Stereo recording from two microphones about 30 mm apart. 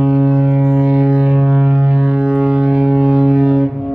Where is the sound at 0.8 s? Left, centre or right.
Right.